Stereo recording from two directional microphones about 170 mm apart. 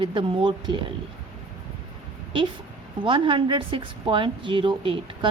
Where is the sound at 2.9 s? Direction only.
30° right (ahead or behind).